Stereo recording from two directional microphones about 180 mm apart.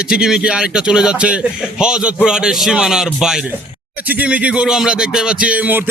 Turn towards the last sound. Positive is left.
turn(degrees=-10)  # may be behind; listen again after turning